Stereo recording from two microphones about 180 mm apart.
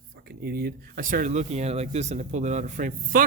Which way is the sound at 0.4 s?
60° right (ahead or behind).